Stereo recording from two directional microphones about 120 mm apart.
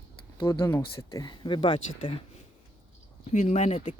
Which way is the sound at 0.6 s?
25° left (ahead or behind).